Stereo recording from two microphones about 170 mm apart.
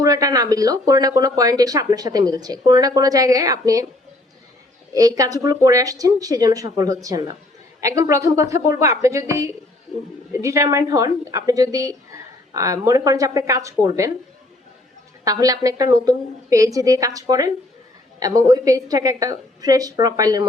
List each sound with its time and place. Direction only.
0.0 s speech: 20° right (ahead or behind)
4.9 s speech: 20° right (ahead or behind)
15.2 s speech: 20° right (ahead or behind)